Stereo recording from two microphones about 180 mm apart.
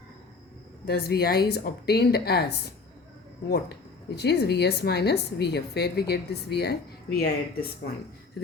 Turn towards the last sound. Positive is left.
turn(degrees=60)  # may be behind; listen again after turning